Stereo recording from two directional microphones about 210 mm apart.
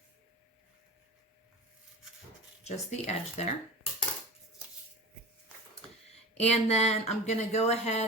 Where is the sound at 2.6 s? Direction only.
30° left (ahead or behind).